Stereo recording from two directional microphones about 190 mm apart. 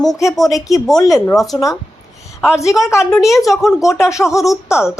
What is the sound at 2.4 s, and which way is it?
Speech, 10° left (ahead or behind).